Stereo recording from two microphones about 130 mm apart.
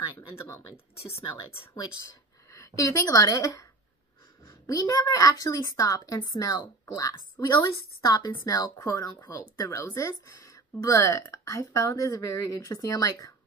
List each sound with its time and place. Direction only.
0.3 s a woman's voice: 20° left (ahead or behind)
2.5 s a woman's voice: 25° left (ahead or behind)
4.6 s a woman's voice: 30° left (ahead or behind)